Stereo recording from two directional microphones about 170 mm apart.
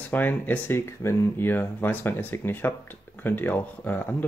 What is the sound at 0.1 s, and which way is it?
Speech, 10° left (ahead or behind).